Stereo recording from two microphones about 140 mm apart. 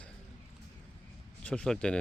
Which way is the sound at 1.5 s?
5° left (ahead or behind).